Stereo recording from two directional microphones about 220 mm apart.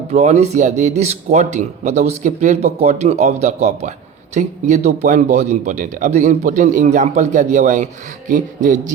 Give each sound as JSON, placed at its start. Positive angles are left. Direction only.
{"t": 0.1, "sound": "speech", "side_deg": -30}